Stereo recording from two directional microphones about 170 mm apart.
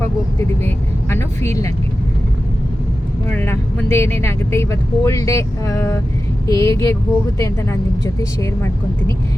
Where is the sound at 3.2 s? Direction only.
10° left (ahead or behind).